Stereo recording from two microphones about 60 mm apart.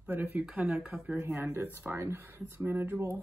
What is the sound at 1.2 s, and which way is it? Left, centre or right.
Speech, right.